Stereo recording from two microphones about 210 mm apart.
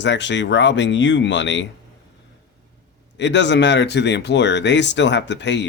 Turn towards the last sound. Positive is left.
turn(degrees=55)  # may be behind; listen again after turning